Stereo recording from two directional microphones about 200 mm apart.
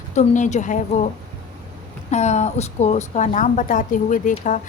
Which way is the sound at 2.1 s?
35° left (ahead or behind).